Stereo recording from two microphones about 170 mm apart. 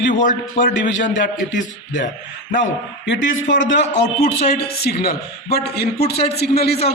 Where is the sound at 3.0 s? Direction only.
90° left.